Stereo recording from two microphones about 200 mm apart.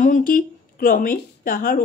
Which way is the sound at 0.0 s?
40° left (ahead or behind).